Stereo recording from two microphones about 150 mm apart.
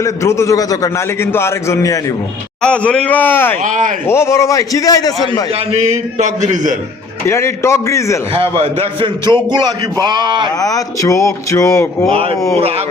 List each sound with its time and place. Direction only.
0.0 s a man's voice: 20° left (ahead or behind)
2.6 s speech: 5° left (ahead or behind)
3.6 s speech: 55° right (ahead or behind)
4.0 s a man's voice: 15° left (ahead or behind)
5.5 s a man's voice: 45° right (ahead or behind)
7.3 s speech: 15° left (ahead or behind)
8.3 s a man's voice: 40° right (ahead or behind)
10.6 s a man's voice: 25° left (ahead or behind)
12.1 s speech: 40° right (ahead or behind)